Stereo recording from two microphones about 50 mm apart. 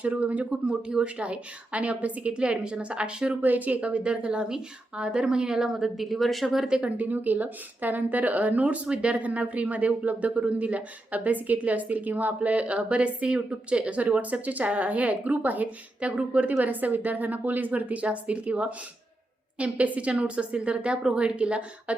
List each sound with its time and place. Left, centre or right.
0.0 s speech: right
0.7 s speech: centre
3.4 s a woman's voice: right; by 6.7 s centre
6.7 s a woman's voice: centre
6.9 s speech: right